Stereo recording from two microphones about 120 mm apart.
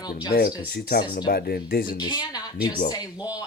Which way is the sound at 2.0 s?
40° left (ahead or behind).